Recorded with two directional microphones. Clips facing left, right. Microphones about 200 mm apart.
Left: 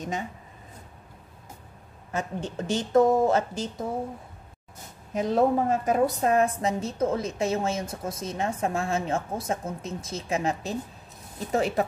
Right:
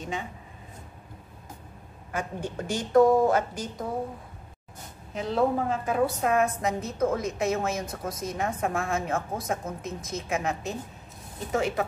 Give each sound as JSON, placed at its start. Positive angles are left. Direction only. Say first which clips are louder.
{"t": 2.1, "sound": "a woman's voice", "louder": "left 1 dB", "side_deg": 25}
{"t": 5.1, "sound": "a woman's voice", "louder": "left 3 dB", "side_deg": 40}